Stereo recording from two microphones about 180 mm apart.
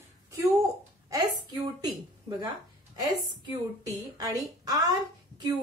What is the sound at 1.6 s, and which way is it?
A woman's voice, 20° right (ahead or behind).